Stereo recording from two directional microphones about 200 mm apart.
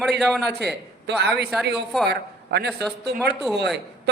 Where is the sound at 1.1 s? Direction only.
55° right (ahead or behind).